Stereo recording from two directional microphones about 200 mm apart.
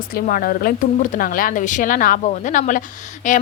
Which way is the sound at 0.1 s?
45° left (ahead or behind).